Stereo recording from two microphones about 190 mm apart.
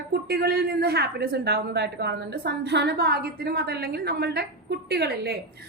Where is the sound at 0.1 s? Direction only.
55° right (ahead or behind).